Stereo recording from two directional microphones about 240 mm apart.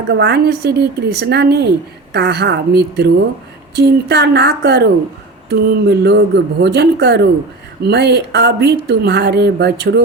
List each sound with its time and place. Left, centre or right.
0.1 s speech: right